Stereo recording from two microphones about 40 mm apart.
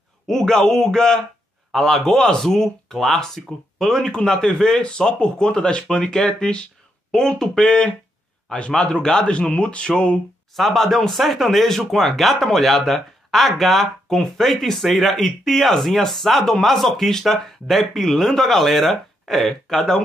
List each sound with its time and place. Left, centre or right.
0.3 s speech: centre
9.5 s speech: left
10.5 s speech: centre